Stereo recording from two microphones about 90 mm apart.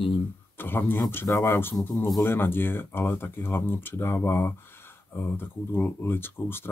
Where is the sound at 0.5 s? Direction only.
25° left (ahead or behind).